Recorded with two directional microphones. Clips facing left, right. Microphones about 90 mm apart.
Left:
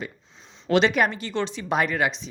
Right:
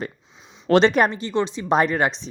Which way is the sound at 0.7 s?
35° right (ahead or behind).